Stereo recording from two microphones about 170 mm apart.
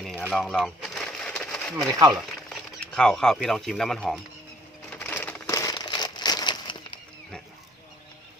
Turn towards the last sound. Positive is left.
turn(degrees=25)  # may be behind; listen again after turning